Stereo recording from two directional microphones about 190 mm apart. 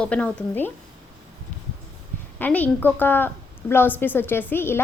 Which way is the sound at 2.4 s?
10° left (ahead or behind).